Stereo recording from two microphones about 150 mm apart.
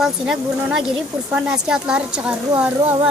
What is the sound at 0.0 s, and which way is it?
Speech, 5° right (ahead or behind).